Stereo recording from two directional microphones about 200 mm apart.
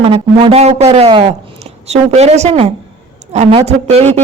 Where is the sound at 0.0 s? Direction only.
30° right (ahead or behind).